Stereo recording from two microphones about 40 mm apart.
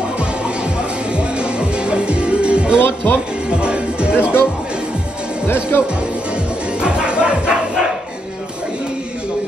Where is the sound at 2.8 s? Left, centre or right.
Left.